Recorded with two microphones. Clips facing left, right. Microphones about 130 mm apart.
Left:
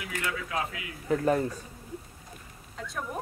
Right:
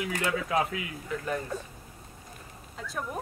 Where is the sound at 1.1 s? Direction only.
35° left (ahead or behind).